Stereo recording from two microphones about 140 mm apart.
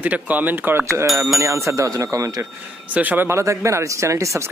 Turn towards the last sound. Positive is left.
turn(degrees=-20)  # may be behind; listen again after turning